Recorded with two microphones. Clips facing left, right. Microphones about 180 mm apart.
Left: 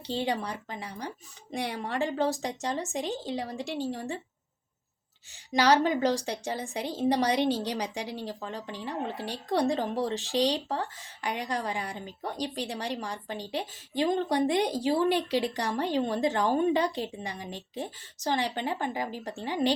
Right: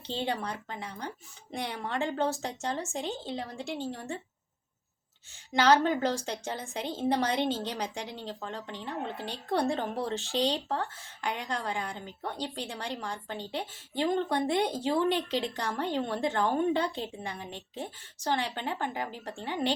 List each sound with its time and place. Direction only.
0.1 s a woman's voice: 15° left (ahead or behind)
5.5 s a woman's voice: 15° left (ahead or behind)